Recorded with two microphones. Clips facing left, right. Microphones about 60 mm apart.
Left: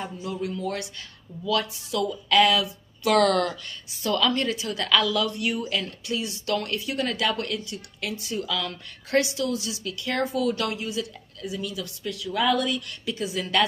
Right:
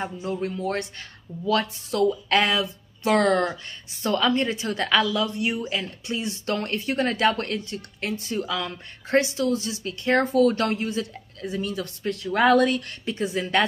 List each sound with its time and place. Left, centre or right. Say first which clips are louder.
0.0 s a woman's voice: right 3 dB; right